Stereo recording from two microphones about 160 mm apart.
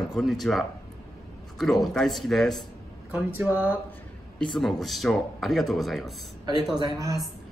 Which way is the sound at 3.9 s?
5° left (ahead or behind).